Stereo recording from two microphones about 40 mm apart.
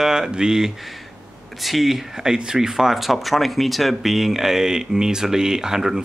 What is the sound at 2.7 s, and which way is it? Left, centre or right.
Speech, centre.